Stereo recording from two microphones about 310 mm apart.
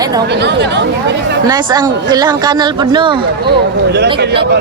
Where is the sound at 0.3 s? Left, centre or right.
Right.